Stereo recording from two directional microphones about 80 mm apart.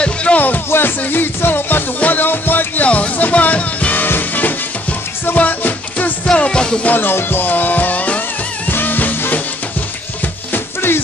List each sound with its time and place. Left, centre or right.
0.0 s music: centre
6.9 s music: left
10.5 s music: left